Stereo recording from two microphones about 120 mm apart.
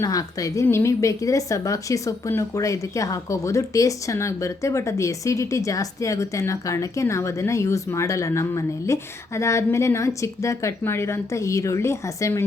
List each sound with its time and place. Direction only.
0.0 s speech: 30° left (ahead or behind)